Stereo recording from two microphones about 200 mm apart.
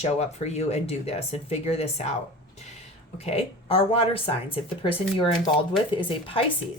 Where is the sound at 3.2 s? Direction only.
30° left (ahead or behind).